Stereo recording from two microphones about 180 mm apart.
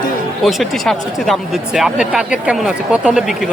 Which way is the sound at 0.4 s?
Centre (ahead or behind).